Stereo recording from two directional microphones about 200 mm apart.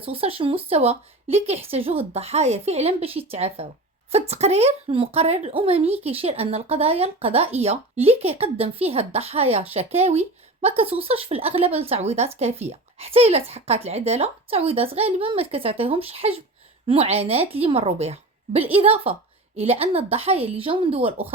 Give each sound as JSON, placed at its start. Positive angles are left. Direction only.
{"t": 0.0, "sound": "a woman's voice", "side_deg": -30}